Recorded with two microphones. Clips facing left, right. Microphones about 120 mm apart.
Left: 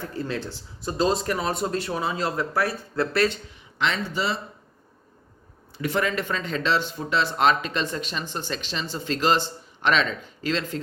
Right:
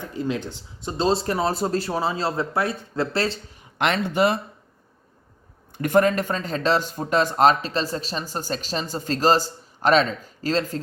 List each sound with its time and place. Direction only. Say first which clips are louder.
0.0 s speech: right 3 dB; 15° right (ahead or behind)
3.8 s speech: right 5 dB; 60° right (ahead or behind)
5.7 s speech: right 7 dB; 50° right (ahead or behind)